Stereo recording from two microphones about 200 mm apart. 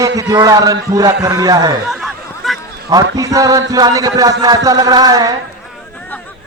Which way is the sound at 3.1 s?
15° right (ahead or behind).